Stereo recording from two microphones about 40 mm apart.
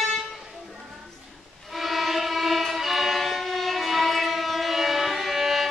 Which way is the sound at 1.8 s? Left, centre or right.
Centre.